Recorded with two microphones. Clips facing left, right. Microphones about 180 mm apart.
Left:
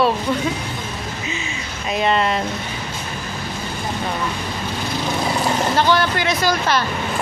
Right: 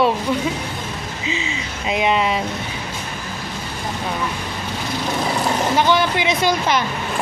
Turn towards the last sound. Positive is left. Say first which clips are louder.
# right 1 dB
turn(degrees=-20)  # may be behind; listen again after turning